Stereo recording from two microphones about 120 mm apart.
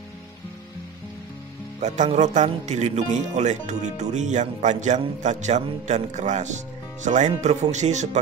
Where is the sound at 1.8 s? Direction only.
75° right (ahead or behind).